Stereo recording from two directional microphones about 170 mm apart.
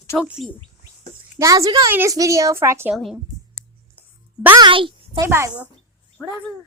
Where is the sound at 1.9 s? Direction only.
15° right (ahead or behind).